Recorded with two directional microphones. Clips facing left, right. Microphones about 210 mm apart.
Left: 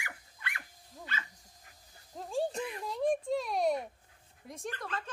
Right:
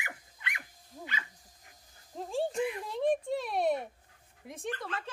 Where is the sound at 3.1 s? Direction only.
Centre (ahead or behind).